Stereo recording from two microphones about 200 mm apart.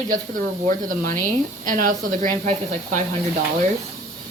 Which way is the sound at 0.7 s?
40° right (ahead or behind).